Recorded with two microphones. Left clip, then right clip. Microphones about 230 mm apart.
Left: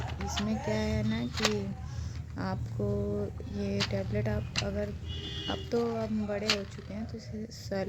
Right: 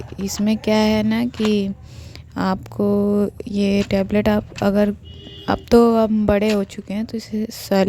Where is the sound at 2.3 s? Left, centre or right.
Right.